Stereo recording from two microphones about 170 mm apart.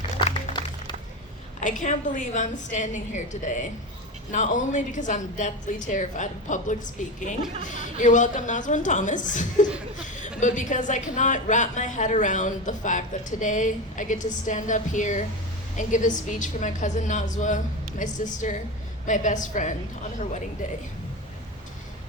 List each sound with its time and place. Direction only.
0.5 s music: 45° left (ahead or behind)
1.6 s a woman's voice: 50° left (ahead or behind)